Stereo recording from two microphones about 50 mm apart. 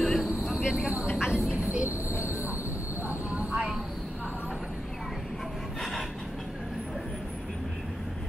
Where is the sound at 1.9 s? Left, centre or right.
Left.